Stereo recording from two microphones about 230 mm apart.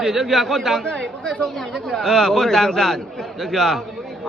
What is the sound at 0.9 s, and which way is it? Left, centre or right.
Speech, right.